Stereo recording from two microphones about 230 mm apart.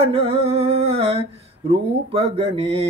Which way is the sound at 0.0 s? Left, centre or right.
Right.